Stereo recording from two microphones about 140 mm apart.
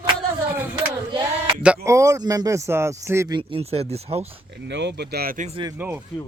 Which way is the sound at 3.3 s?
40° right (ahead or behind).